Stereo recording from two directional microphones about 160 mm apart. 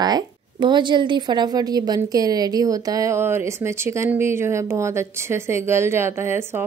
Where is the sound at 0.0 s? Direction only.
25° right (ahead or behind).